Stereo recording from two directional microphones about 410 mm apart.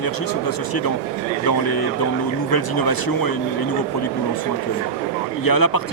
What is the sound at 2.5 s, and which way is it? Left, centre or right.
Speech, left.